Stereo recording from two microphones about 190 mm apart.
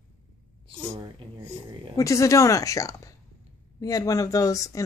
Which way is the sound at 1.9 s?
15° left (ahead or behind).